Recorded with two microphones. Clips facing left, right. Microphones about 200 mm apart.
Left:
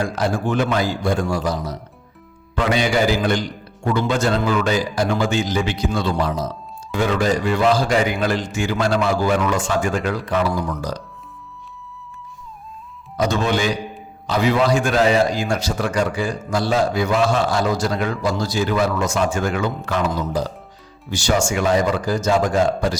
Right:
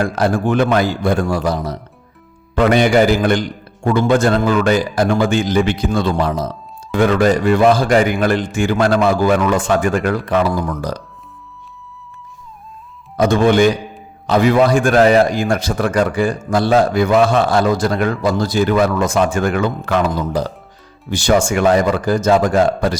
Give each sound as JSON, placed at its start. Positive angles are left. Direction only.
{"t": 0.0, "sound": "a man's voice", "side_deg": -60}
{"t": 13.1, "sound": "a man's voice", "side_deg": -55}